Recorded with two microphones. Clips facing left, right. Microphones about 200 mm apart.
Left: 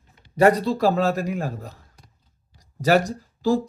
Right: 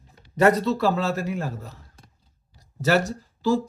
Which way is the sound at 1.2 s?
40° left (ahead or behind).